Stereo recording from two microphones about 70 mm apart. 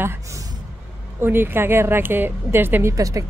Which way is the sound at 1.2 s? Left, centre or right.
Right.